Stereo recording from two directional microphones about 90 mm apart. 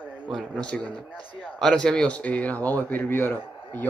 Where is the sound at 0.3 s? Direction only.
5° left (ahead or behind).